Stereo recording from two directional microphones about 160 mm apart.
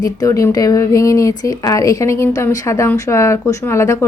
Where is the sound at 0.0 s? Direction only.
20° left (ahead or behind).